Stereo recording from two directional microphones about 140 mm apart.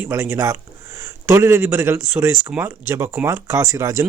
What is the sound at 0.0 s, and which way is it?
Speech, 20° right (ahead or behind).